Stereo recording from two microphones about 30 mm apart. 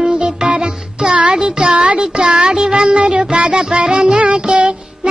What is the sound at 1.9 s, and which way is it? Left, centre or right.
Music, right.